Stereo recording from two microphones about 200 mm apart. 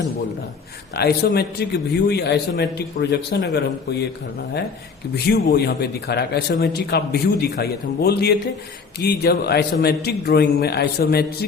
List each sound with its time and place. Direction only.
0.9 s a man's voice: 55° left (ahead or behind)
5.1 s a man's voice: 50° left (ahead or behind)